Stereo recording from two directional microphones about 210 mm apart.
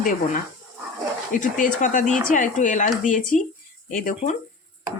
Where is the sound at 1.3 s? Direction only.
40° left (ahead or behind).